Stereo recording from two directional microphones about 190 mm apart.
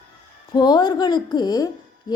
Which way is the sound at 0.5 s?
20° left (ahead or behind).